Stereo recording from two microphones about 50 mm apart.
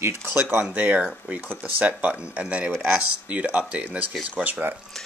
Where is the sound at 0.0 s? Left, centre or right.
Right.